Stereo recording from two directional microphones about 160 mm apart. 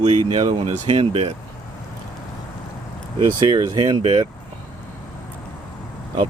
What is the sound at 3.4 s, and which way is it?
Speech, 25° right (ahead or behind).